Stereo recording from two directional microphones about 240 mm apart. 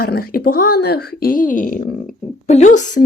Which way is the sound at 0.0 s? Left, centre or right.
Left.